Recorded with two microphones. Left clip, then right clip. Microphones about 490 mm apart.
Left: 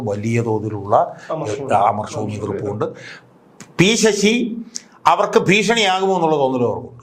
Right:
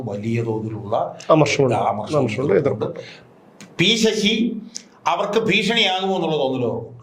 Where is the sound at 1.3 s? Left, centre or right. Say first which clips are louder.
Right 10 dB; right.